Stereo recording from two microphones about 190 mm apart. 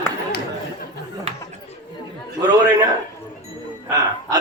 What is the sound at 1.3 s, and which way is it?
Chatter, 35° right (ahead or behind).